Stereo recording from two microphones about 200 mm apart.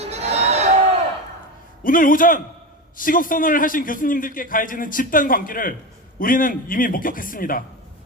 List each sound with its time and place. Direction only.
0.0 s crowd: 30° right (ahead or behind)
1.8 s a man's voice: 45° left (ahead or behind)